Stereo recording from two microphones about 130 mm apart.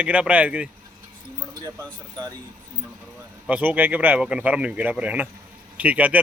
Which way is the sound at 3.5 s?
10° right (ahead or behind).